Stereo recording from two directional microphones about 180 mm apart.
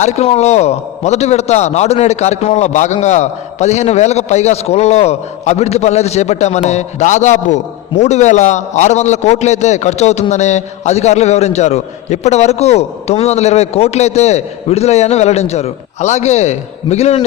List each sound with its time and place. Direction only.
0.0 s a man's voice: 35° left (ahead or behind)